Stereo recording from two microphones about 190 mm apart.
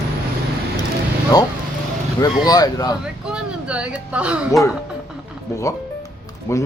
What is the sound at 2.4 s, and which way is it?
Speech, 20° left (ahead or behind).